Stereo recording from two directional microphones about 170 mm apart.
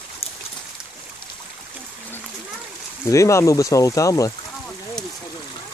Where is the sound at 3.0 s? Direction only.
20° left (ahead or behind).